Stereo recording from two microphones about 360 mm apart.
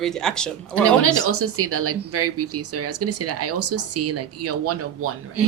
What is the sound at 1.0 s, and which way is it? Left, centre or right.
Speech, right.